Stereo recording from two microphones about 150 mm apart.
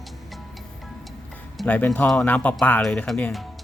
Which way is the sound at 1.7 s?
10° left (ahead or behind).